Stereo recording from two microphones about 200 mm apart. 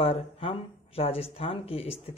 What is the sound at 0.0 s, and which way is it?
Speech, 25° left (ahead or behind).